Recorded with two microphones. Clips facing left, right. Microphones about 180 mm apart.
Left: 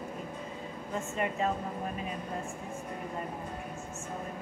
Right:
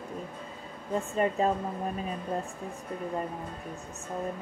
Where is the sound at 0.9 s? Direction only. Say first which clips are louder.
Right 5 dB; 35° right (ahead or behind).